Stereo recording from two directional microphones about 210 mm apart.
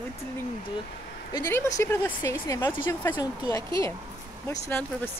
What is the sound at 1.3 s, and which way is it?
Speech, 15° left (ahead or behind).